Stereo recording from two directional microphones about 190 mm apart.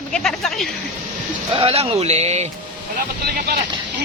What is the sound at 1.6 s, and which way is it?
Speech, 30° right (ahead or behind).